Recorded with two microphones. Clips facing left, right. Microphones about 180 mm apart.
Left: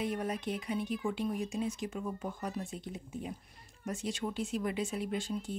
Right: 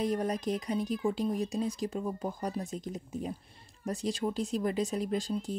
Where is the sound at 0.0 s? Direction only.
40° right (ahead or behind).